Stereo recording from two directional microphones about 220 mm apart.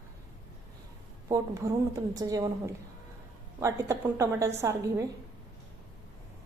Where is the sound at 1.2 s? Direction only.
15° right (ahead or behind).